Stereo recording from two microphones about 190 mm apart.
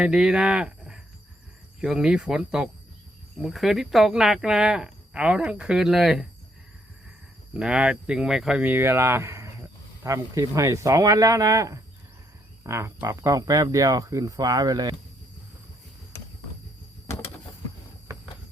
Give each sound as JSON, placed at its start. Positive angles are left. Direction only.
{"t": 0.0, "sound": "speech", "side_deg": -5}
{"t": 7.5, "sound": "speech", "side_deg": -5}